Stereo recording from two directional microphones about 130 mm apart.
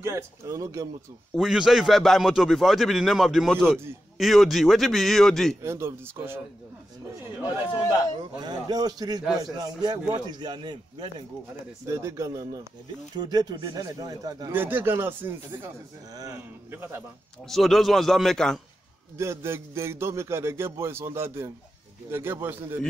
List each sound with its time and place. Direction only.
0.0 s a man's voice: 25° right (ahead or behind)
1.3 s a man's voice: centre (ahead or behind)
5.6 s a man's voice: 20° right (ahead or behind)
8.2 s a man's voice: 35° right (ahead or behind)
11.8 s a man's voice: 20° right (ahead or behind)
14.5 s speech: 15° right (ahead or behind)
16.7 s speech: 15° right (ahead or behind)
17.5 s a man's voice: centre (ahead or behind)
19.1 s a man's voice: 20° right (ahead or behind)